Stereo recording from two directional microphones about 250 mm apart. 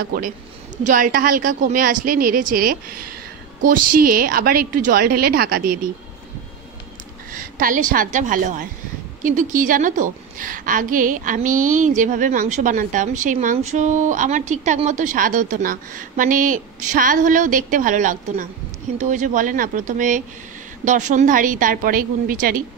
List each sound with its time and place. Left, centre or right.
0.0 s a woman's voice: right
7.3 s a woman's voice: right